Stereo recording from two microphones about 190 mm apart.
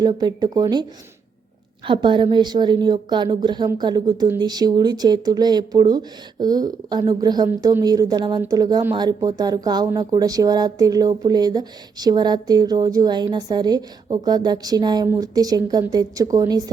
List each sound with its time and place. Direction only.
0.0 s speech: 20° right (ahead or behind)
1.9 s speech: 25° right (ahead or behind)